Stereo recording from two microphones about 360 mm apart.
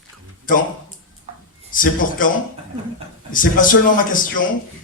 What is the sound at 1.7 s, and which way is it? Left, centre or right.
Speech, left.